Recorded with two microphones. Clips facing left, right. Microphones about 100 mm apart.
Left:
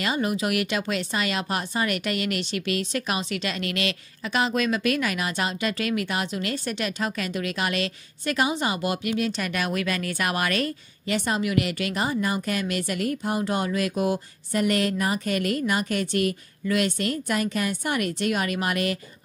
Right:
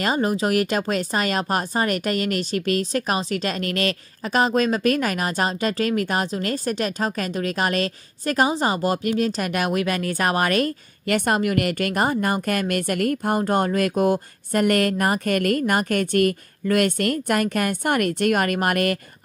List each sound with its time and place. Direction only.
0.0 s speech: 40° right (ahead or behind); by 18.9 s 55° right (ahead or behind)